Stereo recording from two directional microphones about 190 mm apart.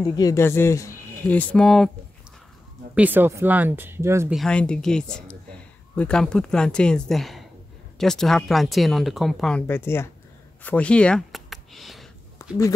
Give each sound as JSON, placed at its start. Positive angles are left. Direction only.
{"t": 0.0, "sound": "speech", "side_deg": 20}
{"t": 2.9, "sound": "speech", "side_deg": -10}
{"t": 4.3, "sound": "speech", "side_deg": 5}
{"t": 10.6, "sound": "a sound", "side_deg": 5}
{"t": 12.4, "sound": "speech", "side_deg": 15}